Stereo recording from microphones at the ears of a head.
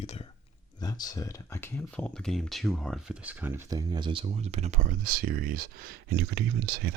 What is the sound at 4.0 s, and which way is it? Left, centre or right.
Speech, right.